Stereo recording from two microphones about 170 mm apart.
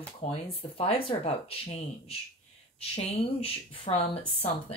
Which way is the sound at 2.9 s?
35° left (ahead or behind).